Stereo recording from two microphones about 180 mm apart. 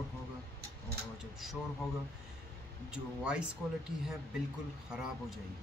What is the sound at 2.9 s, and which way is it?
Speech, 5° right (ahead or behind).